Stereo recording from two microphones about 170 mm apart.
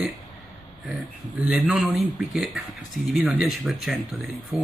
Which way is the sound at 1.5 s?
5° right (ahead or behind).